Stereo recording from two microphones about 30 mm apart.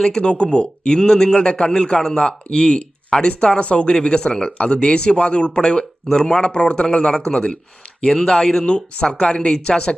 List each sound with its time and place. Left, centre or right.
0.2 s a man's voice: left
2.1 s a man's voice: left
4.0 s speech: left
4.4 s a man's voice: left
8.0 s speech: centre